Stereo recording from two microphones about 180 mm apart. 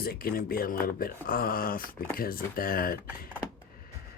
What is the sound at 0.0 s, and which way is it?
Speech, 55° left (ahead or behind).